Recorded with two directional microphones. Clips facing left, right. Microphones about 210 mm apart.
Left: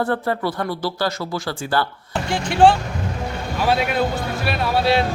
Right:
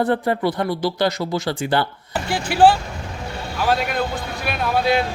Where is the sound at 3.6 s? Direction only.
10° left (ahead or behind).